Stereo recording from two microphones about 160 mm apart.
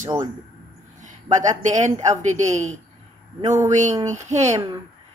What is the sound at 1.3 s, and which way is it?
Speech, 50° right (ahead or behind).